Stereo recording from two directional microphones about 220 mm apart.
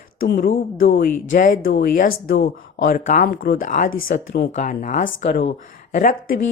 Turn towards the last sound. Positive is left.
turn(degrees=35)  # may be behind; listen again after turning